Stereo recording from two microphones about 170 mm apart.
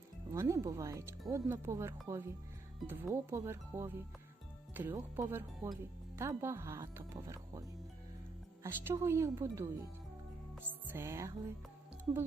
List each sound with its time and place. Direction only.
0.3 s speech: 15° right (ahead or behind)
8.6 s speech: 15° right (ahead or behind)
10.7 s speech: 15° right (ahead or behind)